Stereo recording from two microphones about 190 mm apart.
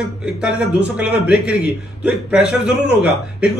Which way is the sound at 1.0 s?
5° right (ahead or behind).